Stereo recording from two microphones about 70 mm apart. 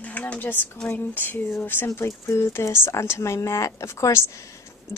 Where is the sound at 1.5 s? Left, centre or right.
Left.